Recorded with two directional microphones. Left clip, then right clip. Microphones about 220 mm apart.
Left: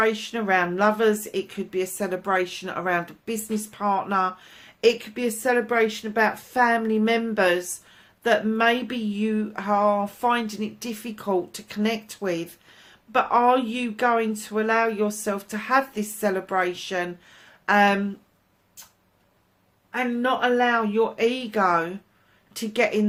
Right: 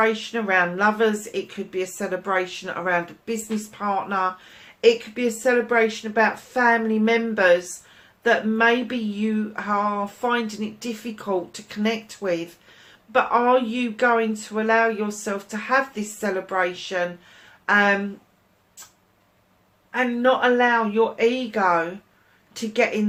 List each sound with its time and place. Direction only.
0.0 s speech: 45° left (ahead or behind)
19.9 s speech: 40° left (ahead or behind)